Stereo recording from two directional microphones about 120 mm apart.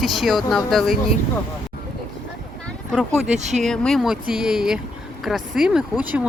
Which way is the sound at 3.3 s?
75° right (ahead or behind).